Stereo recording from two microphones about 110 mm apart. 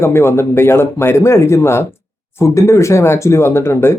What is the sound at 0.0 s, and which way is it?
Speech, 25° left (ahead or behind).